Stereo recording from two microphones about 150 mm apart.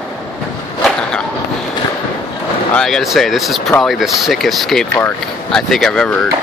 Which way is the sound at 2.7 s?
Centre (ahead or behind).